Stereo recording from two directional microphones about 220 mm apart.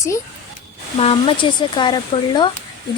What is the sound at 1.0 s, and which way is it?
Speech, 25° left (ahead or behind).